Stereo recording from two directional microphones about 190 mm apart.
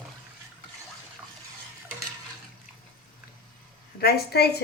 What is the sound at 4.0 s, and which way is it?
Speech, 55° left (ahead or behind).